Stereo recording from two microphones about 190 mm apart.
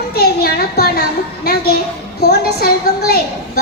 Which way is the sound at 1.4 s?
55° left (ahead or behind).